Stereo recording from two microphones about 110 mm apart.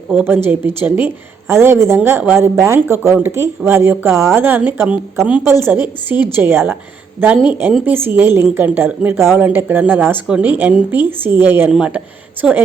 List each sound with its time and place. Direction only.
0.1 s a woman's voice: 20° right (ahead or behind)
5.5 s a woman's voice: 20° right (ahead or behind)